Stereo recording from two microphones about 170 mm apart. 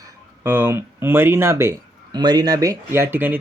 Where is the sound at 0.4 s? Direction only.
10° right (ahead or behind).